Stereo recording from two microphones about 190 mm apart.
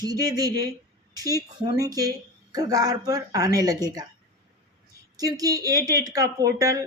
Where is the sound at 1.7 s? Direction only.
20° right (ahead or behind).